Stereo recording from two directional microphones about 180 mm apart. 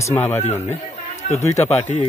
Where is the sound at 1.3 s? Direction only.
40° left (ahead or behind).